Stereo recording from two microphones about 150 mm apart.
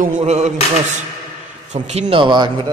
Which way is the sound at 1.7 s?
50° right (ahead or behind).